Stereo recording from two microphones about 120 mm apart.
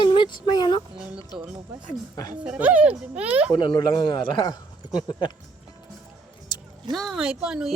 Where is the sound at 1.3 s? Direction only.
5° right (ahead or behind).